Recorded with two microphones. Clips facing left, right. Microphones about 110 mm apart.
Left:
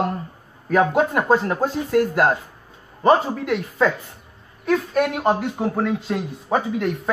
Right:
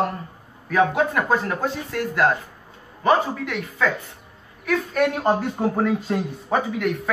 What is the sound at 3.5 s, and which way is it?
Speech, 30° left (ahead or behind).